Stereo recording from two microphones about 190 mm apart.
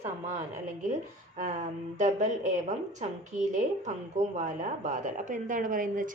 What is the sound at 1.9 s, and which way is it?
A woman's voice, 40° right (ahead or behind).